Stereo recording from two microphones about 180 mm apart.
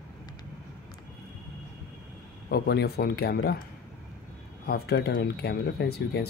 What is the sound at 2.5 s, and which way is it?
Speech, 65° left (ahead or behind).